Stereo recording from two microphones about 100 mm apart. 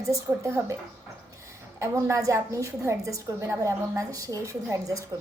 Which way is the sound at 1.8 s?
30° right (ahead or behind).